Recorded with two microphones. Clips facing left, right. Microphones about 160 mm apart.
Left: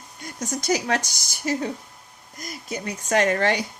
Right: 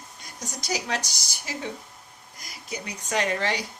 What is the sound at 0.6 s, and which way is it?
Speech, 55° left (ahead or behind).